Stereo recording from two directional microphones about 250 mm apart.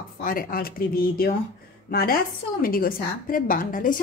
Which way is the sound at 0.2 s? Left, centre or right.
Left.